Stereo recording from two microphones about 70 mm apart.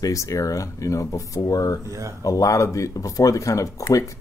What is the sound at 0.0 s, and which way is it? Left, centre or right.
Speech, left.